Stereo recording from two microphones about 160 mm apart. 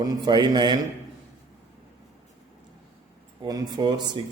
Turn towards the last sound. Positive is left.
turn(degrees=-25)  # may be behind; listen again after turning